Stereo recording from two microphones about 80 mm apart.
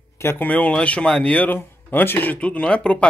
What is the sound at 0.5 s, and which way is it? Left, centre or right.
Speech, centre.